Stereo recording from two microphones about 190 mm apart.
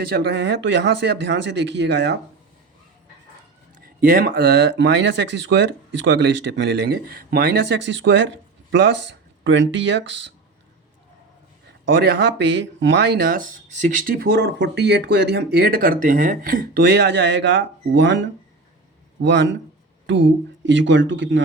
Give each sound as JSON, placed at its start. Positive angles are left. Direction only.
{"t": 0.0, "sound": "speech", "side_deg": -55}
{"t": 4.0, "sound": "speech", "side_deg": -45}
{"t": 11.9, "sound": "a man's voice", "side_deg": -55}
{"t": 20.7, "sound": "a man's voice", "side_deg": -70}